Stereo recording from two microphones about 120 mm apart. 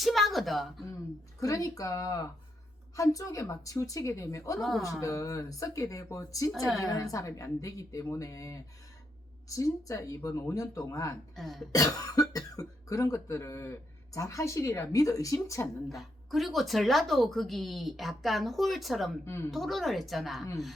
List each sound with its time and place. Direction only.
0.0 s speech: centre (ahead or behind)
1.4 s speech: 30° left (ahead or behind)
9.6 s speech: 30° left (ahead or behind)
11.3 s speech: centre (ahead or behind)
11.7 s cough: 30° left (ahead or behind)
12.5 s speech: 30° left (ahead or behind)
15.9 s speech: centre (ahead or behind)
19.2 s speech: 20° left (ahead or behind)
19.5 s speech: centre (ahead or behind)